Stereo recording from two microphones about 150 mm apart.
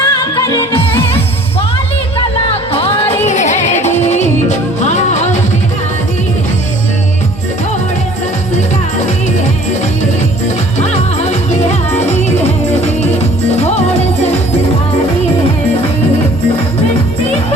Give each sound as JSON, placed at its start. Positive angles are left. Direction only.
{"t": 0.0, "sound": "music", "side_deg": 25}
{"t": 2.7, "sound": "music", "side_deg": 40}
{"t": 10.8, "sound": "music", "side_deg": 50}